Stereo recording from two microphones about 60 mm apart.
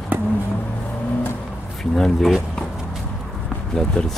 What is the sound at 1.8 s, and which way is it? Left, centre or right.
Speech, centre.